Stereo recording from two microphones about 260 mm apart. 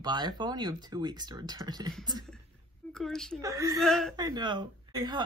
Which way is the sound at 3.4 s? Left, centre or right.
Centre.